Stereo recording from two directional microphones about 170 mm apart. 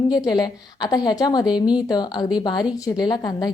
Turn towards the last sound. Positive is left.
turn(degrees=25)  # may be behind; listen again after turning